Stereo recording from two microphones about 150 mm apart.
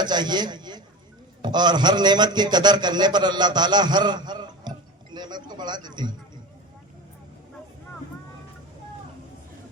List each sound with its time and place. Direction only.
0.0 s a man's voice: 30° right (ahead or behind)